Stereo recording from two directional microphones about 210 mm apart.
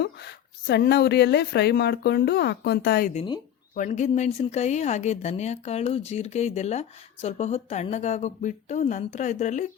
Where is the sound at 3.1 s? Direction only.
25° left (ahead or behind).